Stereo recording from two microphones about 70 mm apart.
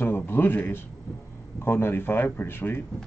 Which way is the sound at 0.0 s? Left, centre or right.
Left.